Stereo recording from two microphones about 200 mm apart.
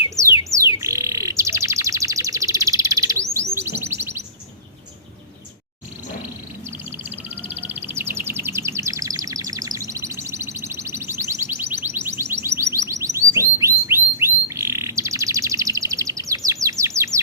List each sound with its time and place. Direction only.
0.5 s bird: 15° right (ahead or behind)
6.7 s bird: 10° right (ahead or behind)